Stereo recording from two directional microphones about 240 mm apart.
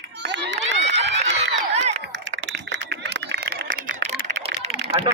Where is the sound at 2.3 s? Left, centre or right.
Right.